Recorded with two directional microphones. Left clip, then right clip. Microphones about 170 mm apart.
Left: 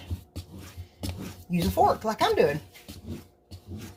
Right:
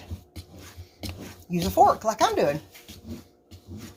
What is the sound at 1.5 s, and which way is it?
Speech, 35° right (ahead or behind).